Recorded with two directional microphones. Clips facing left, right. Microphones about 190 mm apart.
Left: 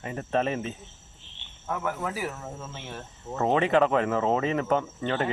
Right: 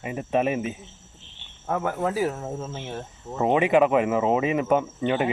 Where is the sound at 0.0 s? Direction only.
10° right (ahead or behind).